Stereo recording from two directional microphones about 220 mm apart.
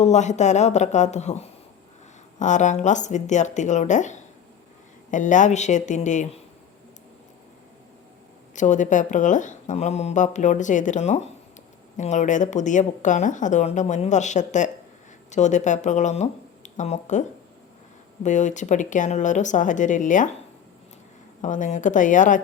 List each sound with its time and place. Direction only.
0.0 s a woman's voice: 30° left (ahead or behind)
8.5 s a woman's voice: 35° left (ahead or behind)
21.4 s a woman's voice: 35° left (ahead or behind)